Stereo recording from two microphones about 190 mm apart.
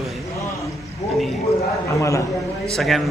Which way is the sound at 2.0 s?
15° left (ahead or behind).